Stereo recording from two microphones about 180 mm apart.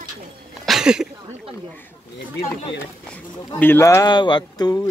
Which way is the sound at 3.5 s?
10° left (ahead or behind).